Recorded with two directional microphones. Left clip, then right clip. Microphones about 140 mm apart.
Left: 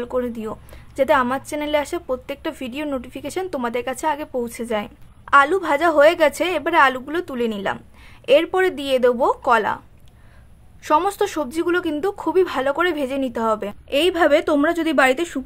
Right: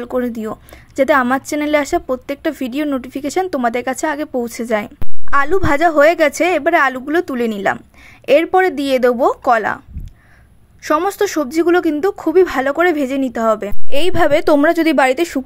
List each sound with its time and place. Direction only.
0.0 s a woman's voice: 35° right (ahead or behind)
10.8 s a woman's voice: 25° right (ahead or behind)
13.8 s a woman's voice: 60° right (ahead or behind)